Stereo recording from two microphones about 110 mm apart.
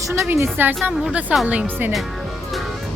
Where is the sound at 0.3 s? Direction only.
20° right (ahead or behind).